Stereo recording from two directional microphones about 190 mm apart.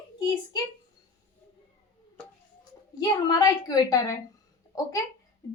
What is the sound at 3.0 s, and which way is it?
A woman's voice, 20° left (ahead or behind).